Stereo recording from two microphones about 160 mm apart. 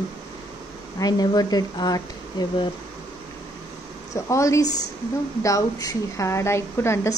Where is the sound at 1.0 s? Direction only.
25° left (ahead or behind).